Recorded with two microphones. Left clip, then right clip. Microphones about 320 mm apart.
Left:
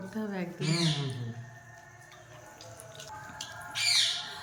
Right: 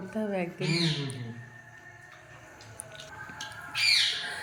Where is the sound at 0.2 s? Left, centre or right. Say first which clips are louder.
Right 6 dB; centre.